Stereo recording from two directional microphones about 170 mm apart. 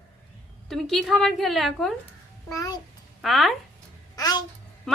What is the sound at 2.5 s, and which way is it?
Speech, 20° left (ahead or behind).